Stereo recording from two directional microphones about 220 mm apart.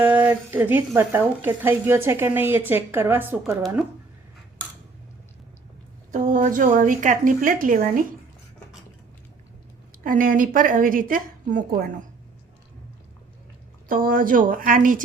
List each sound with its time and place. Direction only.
0.0 s speech: 5° right (ahead or behind)
6.1 s a woman's voice: 35° right (ahead or behind)
10.0 s a woman's voice: 40° right (ahead or behind)
13.8 s a woman's voice: 40° right (ahead or behind)